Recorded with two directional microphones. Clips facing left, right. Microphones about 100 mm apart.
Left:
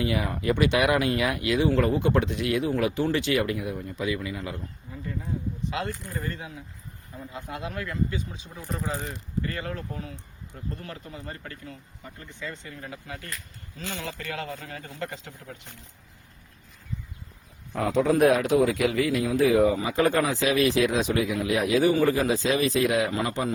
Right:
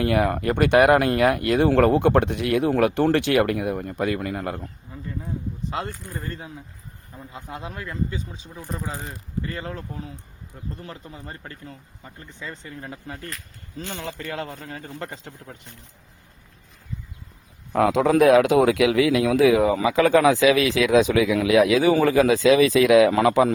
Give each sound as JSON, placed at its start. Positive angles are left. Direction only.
{"t": 0.0, "sound": "speech", "side_deg": -60}
{"t": 7.3, "sound": "speech", "side_deg": -25}
{"t": 9.4, "sound": "speech", "side_deg": -25}
{"t": 17.7, "sound": "a man's voice", "side_deg": -80}